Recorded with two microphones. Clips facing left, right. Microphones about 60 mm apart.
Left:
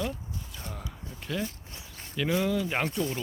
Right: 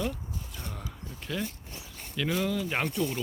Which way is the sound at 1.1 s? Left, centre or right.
Centre.